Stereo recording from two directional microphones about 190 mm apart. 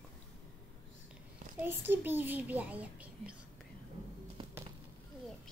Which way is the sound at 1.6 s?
10° right (ahead or behind).